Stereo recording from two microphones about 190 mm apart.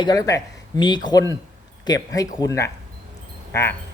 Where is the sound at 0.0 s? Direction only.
20° left (ahead or behind).